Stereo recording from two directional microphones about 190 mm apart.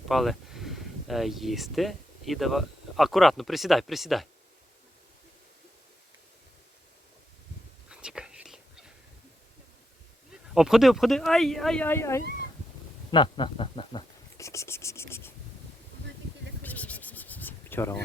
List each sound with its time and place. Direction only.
0.1 s speech: centre (ahead or behind)
7.9 s whispering: 5° right (ahead or behind)
10.5 s speech: 5° right (ahead or behind); by 12.2 s 15° left (ahead or behind)
13.1 s speech: 25° left (ahead or behind)
14.3 s speech: 15° left (ahead or behind)
16.6 s a sound: 10° left (ahead or behind)